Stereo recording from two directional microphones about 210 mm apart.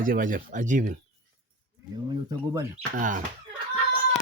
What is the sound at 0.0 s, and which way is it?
Speech, 40° right (ahead or behind).